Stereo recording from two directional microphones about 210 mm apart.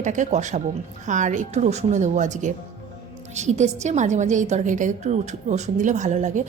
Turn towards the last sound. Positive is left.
turn(degrees=-35)  # may be behind; listen again after turning